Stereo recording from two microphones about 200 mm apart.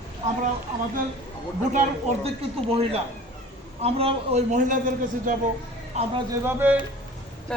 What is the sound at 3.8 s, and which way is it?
A man's voice, 30° right (ahead or behind).